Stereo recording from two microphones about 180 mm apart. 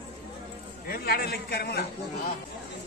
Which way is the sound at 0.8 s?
55° left (ahead or behind).